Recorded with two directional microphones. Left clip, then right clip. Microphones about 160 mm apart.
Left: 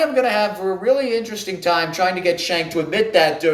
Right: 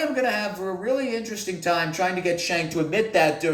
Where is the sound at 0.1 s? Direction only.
10° left (ahead or behind).